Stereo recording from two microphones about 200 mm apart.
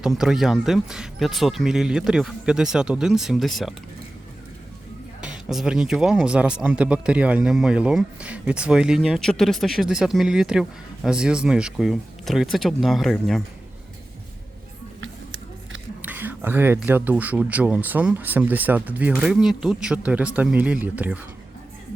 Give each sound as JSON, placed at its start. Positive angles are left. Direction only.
{"t": 0.0, "sound": "speech", "side_deg": -5}
{"t": 5.2, "sound": "speech", "side_deg": -5}
{"t": 15.0, "sound": "a sound", "side_deg": -70}
{"t": 16.0, "sound": "speech", "side_deg": -10}